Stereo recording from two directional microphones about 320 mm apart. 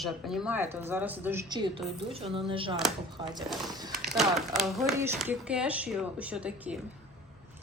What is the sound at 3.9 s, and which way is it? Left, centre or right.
A woman's voice, centre.